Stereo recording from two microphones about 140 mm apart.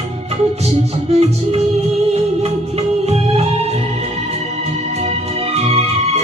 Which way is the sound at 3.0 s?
50° right (ahead or behind).